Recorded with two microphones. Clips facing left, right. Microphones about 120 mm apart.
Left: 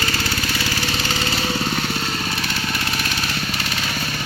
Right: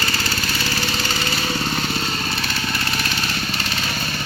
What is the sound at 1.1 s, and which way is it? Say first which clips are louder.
Lawn mower: left 1 dB; 15° left (ahead or behind).